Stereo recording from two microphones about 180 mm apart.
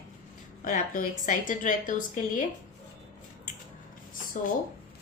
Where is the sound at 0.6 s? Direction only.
50° left (ahead or behind).